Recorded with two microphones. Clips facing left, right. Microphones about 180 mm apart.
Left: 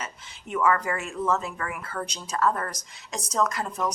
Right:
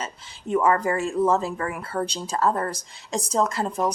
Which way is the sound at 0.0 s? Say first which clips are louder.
Right 5 dB; 30° right (ahead or behind).